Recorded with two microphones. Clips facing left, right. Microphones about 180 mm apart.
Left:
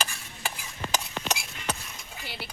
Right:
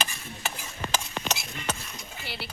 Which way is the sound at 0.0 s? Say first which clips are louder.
Right 1 dB; 10° left (ahead or behind).